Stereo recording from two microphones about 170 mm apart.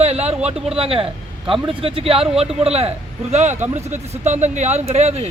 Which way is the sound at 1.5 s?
Centre (ahead or behind).